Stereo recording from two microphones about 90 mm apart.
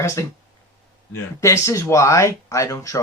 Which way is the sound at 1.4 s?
35° left (ahead or behind).